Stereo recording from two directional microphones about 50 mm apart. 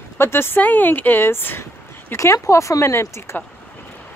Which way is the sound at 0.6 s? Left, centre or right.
Left.